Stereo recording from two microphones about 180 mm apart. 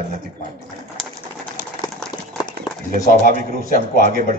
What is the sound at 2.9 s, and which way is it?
A man's voice, 55° right (ahead or behind).